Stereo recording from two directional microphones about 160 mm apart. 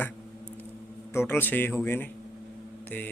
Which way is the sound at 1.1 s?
15° left (ahead or behind).